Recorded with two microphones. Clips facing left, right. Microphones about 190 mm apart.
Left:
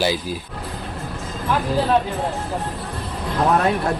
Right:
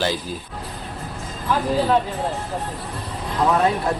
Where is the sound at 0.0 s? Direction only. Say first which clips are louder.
Left 2 dB; 10° left (ahead or behind).